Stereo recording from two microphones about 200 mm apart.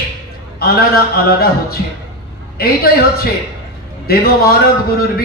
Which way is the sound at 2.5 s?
50° left (ahead or behind).